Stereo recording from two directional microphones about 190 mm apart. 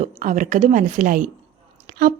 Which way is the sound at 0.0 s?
45° right (ahead or behind).